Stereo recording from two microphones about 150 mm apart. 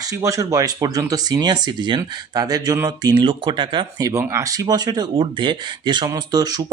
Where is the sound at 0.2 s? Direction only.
20° right (ahead or behind).